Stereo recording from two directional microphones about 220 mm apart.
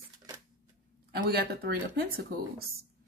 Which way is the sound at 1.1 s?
45° right (ahead or behind).